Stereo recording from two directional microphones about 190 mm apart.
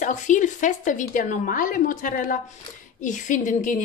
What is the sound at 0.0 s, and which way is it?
A woman's voice, 40° left (ahead or behind).